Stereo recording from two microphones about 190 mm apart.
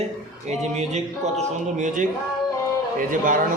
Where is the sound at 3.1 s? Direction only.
45° right (ahead or behind).